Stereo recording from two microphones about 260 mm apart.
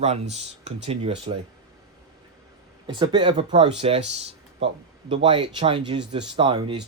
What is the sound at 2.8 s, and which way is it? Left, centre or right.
Speech, centre.